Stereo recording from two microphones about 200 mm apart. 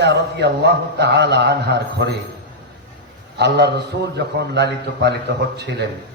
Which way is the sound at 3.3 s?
55° right (ahead or behind).